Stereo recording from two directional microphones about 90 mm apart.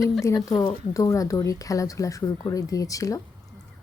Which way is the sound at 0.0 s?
35° left (ahead or behind).